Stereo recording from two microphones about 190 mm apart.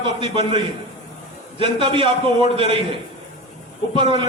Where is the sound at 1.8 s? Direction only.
25° right (ahead or behind).